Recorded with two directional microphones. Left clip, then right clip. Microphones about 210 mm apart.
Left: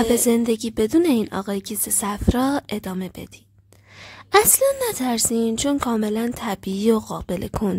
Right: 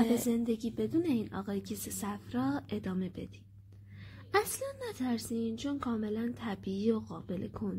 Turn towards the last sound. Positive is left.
turn(degrees=45)  # may be behind; listen again after turning